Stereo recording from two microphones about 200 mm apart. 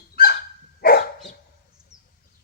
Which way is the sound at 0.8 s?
50° left (ahead or behind).